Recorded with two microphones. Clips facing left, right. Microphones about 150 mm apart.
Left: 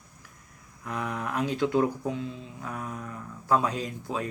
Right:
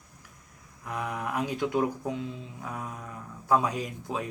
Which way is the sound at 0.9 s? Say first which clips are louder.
Left 1 dB; 15° right (ahead or behind).